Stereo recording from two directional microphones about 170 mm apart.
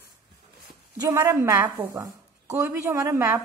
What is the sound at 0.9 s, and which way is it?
A woman's voice, 20° right (ahead or behind).